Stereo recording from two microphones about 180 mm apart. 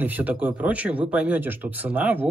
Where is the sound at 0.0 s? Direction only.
10° right (ahead or behind).